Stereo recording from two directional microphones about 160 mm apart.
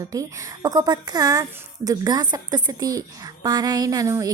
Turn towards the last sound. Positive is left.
turn(degrees=-20)  # may be behind; listen again after turning